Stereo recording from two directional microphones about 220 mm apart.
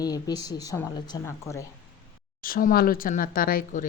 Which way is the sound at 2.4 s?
40° left (ahead or behind).